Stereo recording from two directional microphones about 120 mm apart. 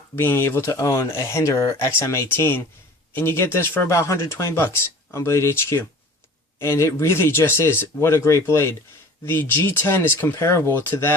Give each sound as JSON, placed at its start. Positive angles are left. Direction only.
{"t": 0.2, "sound": "speech", "side_deg": 20}